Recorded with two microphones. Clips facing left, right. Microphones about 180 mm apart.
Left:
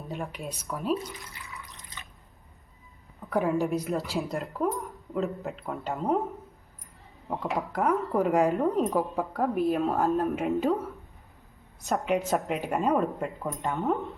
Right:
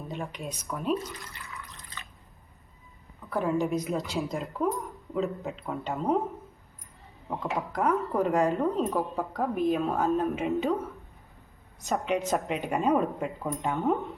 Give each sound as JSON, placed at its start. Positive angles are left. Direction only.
{"t": 0.1, "sound": "speech", "side_deg": 0}
{"t": 1.5, "sound": "drip", "side_deg": 15}
{"t": 3.3, "sound": "speech", "side_deg": 10}
{"t": 8.7, "sound": "speech", "side_deg": 15}
{"t": 9.1, "sound": "speech", "side_deg": 5}
{"t": 11.9, "sound": "speech", "side_deg": 0}